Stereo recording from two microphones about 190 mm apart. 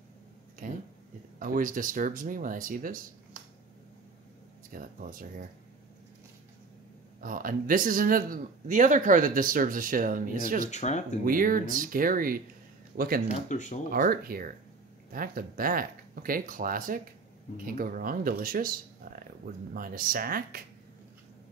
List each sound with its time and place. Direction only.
0.6 s speech: 45° right (ahead or behind)
4.6 s speech: 45° right (ahead or behind)
7.2 s speech: 45° right (ahead or behind)
10.7 s speech: 35° left (ahead or behind)
11.2 s speech: 45° right (ahead or behind)
13.3 s speech: 40° left (ahead or behind)
13.8 s speech: 50° right (ahead or behind)